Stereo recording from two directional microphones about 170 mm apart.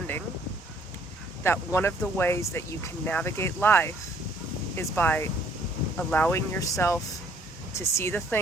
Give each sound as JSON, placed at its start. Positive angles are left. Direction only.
{"t": 1.5, "sound": "speech", "side_deg": 15}